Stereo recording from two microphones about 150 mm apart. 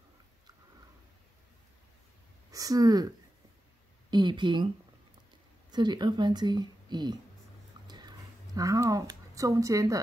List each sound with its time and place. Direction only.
2.5 s speech: 25° right (ahead or behind)
5.7 s speech: 30° right (ahead or behind)
7.8 s a sound: 25° right (ahead or behind)
8.5 s speech: 20° right (ahead or behind)